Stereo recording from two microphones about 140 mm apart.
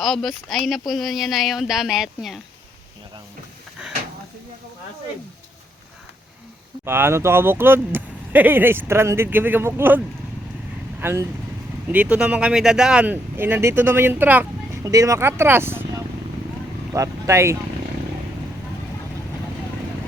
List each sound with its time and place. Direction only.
0.0 s speech: centre (ahead or behind)
6.8 s speech: 15° right (ahead or behind)
11.0 s speech: 20° right (ahead or behind)
14.8 s speech: 25° right (ahead or behind)
16.9 s speech: 20° right (ahead or behind)